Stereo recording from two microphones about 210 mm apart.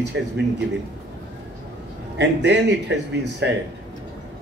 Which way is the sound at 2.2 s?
55° right (ahead or behind).